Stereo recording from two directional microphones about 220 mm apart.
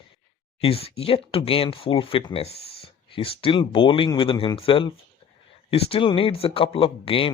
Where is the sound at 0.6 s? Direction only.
25° left (ahead or behind).